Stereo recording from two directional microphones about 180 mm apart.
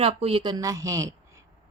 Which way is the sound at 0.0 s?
35° right (ahead or behind).